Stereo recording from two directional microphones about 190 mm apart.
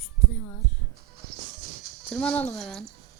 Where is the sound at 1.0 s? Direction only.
55° right (ahead or behind).